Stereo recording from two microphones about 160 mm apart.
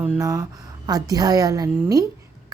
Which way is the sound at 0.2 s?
20° right (ahead or behind).